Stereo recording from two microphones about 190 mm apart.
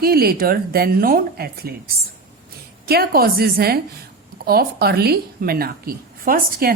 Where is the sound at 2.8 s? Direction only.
55° right (ahead or behind).